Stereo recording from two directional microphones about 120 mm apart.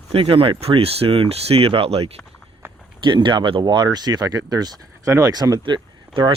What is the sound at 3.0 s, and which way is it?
Speech, 40° right (ahead or behind).